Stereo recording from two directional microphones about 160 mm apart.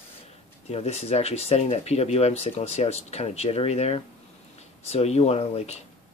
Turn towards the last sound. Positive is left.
turn(degrees=40)  # may be behind; listen again after turning